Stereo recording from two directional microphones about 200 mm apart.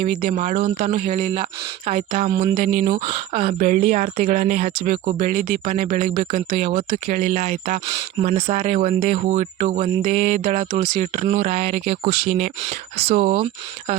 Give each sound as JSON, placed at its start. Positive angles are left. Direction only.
{"t": 0.0, "sound": "speech", "side_deg": -50}
{"t": 2.2, "sound": "speech", "side_deg": -30}
{"t": 2.6, "sound": "speech", "side_deg": -40}
{"t": 3.1, "sound": "speech", "side_deg": -25}
{"t": 3.6, "sound": "speech", "side_deg": -40}